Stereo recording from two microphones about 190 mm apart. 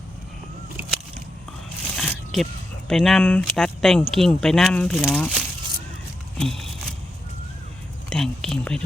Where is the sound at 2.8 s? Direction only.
Centre (ahead or behind).